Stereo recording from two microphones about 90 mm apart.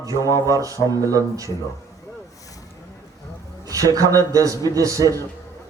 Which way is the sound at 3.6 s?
40° right (ahead or behind).